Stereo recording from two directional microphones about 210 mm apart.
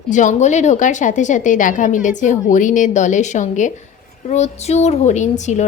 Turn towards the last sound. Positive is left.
turn(degrees=35)  # may be behind; listen again after turning